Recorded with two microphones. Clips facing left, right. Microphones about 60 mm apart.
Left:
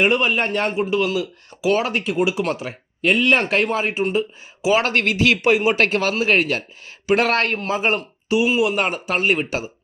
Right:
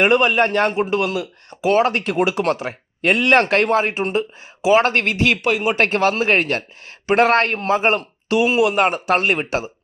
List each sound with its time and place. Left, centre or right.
0.0 s a man's voice: right
3.8 s speech: right
5.5 s speech: centre
5.9 s a man's voice: right
9.4 s speech: right